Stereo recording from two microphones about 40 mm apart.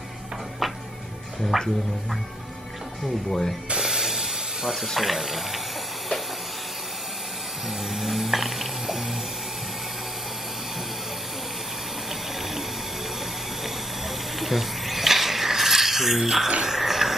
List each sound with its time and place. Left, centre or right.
1.5 s speech: centre
3.3 s speech: centre
3.7 s hiss: centre
4.8 s speech: centre
7.9 s music: centre
14.4 s a sound: centre